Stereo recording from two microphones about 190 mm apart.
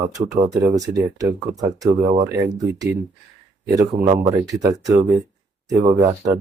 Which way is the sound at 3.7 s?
25° right (ahead or behind).